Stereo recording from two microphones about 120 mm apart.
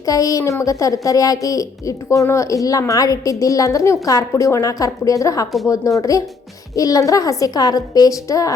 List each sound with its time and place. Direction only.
0.0 s a woman's voice: 30° left (ahead or behind)